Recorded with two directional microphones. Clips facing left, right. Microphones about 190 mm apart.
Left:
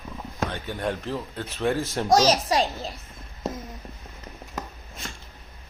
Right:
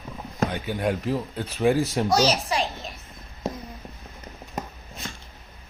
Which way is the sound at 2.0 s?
40° left (ahead or behind).